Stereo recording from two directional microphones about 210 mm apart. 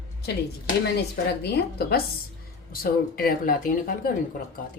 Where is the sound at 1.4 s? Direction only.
45° left (ahead or behind).